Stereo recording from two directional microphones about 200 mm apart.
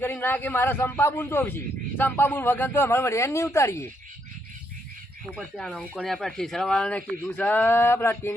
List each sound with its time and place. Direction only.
0.0 s a man's voice: 10° left (ahead or behind)
5.4 s a man's voice: 5° left (ahead or behind)